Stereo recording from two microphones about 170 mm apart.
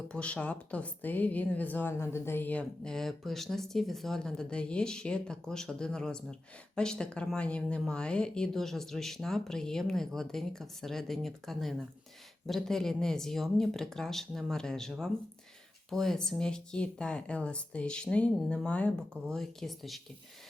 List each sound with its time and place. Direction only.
0.1 s speech: 5° left (ahead or behind)